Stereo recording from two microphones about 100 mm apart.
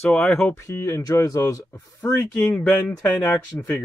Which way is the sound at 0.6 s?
30° left (ahead or behind).